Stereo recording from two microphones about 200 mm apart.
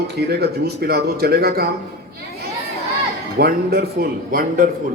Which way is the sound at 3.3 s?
50° right (ahead or behind).